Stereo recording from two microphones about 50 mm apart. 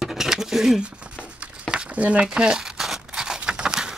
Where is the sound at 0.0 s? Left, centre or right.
Centre.